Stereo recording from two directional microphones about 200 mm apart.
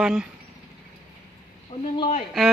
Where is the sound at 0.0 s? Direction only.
5° right (ahead or behind).